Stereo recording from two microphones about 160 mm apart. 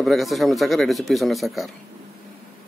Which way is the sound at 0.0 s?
Centre (ahead or behind).